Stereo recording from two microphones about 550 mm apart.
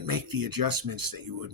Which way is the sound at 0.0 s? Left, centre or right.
Right.